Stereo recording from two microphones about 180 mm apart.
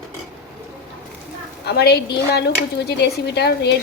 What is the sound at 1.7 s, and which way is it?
Speech, 65° left (ahead or behind).